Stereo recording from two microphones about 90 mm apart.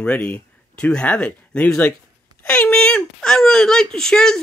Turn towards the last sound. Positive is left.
turn(degrees=5)  # may be behind; listen again after turning